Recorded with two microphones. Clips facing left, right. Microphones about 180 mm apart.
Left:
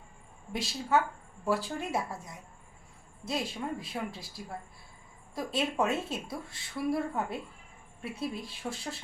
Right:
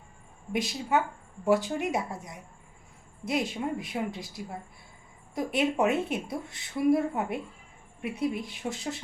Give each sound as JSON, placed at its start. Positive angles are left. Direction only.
{"t": 0.5, "sound": "a woman's voice", "side_deg": -15}